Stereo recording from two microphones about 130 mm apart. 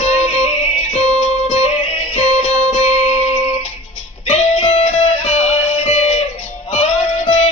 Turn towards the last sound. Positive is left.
turn(degrees=50)  # may be behind; listen again after turning